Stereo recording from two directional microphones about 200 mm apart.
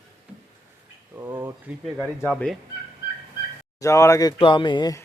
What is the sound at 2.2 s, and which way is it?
Speech, 5° left (ahead or behind).